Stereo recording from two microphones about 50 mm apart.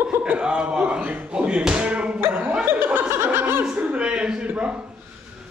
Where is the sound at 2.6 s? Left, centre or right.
Right.